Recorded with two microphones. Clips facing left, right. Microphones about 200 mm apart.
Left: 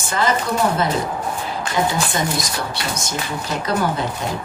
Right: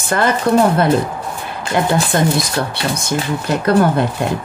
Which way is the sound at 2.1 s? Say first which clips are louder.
Right 6 dB; 60° right (ahead or behind).